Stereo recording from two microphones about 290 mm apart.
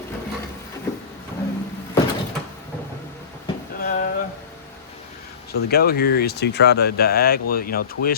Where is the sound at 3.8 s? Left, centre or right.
Left.